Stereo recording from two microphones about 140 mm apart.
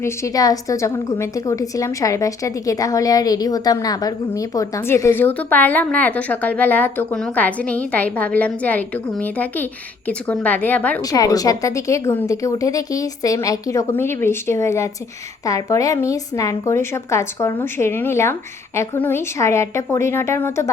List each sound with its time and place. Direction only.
0.0 s a woman's voice: 25° left (ahead or behind)
11.1 s a woman's voice: 25° left (ahead or behind)